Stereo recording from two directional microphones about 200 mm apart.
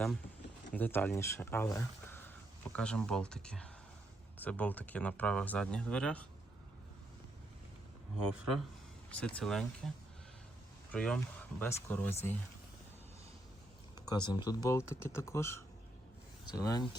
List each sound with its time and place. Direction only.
0.7 s speech: 10° left (ahead or behind)
9.0 s speech: 5° left (ahead or behind)
10.9 s speech: 5° left (ahead or behind)
14.1 s speech: 20° left (ahead or behind)